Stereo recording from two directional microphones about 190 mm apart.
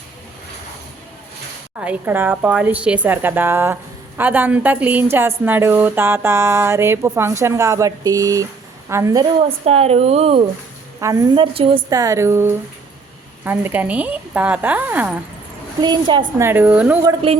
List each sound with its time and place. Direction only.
1.8 s a woman's voice: 10° right (ahead or behind)
9.4 s a woman's voice: 35° right (ahead or behind)
11.0 s a woman's voice: 20° right (ahead or behind)
15.8 s a woman's voice: 25° right (ahead or behind)
16.4 s a woman's voice: 10° right (ahead or behind)
17.0 s a woman's voice: 20° right (ahead or behind)